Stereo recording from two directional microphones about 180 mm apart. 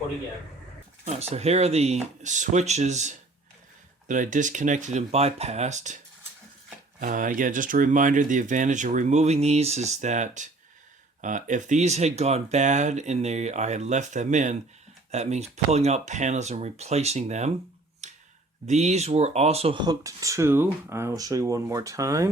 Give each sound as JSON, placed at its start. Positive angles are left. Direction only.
{"t": 1.0, "sound": "speech", "side_deg": -35}
{"t": 7.0, "sound": "speech", "side_deg": -45}
{"t": 18.0, "sound": "a sound", "side_deg": -40}
{"t": 18.6, "sound": "speech", "side_deg": -40}